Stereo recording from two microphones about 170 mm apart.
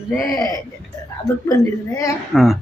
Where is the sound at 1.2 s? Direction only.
20° left (ahead or behind).